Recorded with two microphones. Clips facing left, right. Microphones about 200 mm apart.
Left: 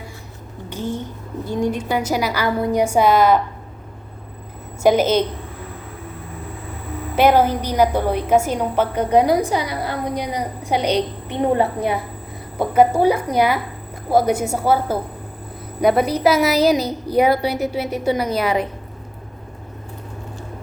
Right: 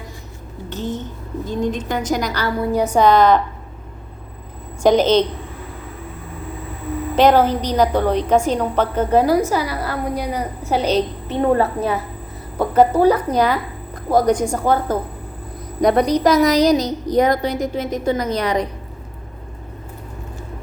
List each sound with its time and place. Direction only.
0.7 s a sound: 10° left (ahead or behind)
1.5 s a woman's voice: 10° left (ahead or behind)
4.8 s a woman's voice: 10° left (ahead or behind)
7.2 s a woman's voice: 10° left (ahead or behind)